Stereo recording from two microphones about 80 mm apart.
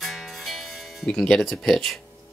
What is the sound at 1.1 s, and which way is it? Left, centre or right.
Speech, centre.